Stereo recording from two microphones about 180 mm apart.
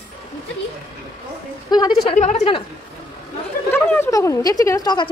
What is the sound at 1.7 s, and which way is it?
Speech, 25° left (ahead or behind).